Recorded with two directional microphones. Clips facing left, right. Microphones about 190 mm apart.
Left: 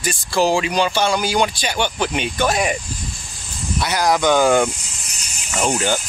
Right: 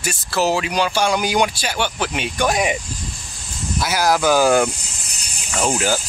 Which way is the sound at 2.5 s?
15° right (ahead or behind).